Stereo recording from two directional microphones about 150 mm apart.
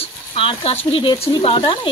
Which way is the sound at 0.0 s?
40° left (ahead or behind).